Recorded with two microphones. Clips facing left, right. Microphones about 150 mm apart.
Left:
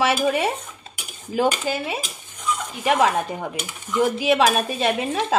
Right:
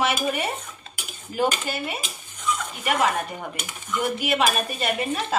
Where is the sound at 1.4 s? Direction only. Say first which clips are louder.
Left 3 dB; 90° left.